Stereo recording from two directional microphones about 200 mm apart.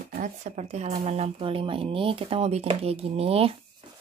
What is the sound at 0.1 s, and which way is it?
Speech, 40° right (ahead or behind).